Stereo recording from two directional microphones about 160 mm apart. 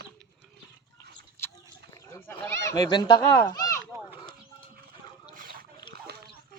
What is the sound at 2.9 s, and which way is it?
Speech, 25° left (ahead or behind).